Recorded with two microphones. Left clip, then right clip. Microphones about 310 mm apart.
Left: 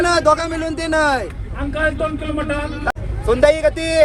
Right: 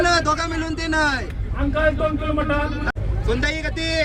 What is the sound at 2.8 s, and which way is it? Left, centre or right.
Speech, centre.